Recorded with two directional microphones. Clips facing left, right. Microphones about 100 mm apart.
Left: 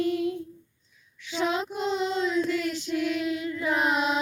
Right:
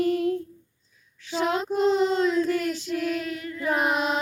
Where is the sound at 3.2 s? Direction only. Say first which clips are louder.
Left 4 dB; 20° left (ahead or behind).